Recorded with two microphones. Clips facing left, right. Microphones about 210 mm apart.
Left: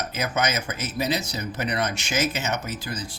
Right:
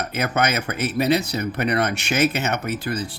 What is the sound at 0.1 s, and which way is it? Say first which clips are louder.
Speech: right 4 dB; 60° right (ahead or behind).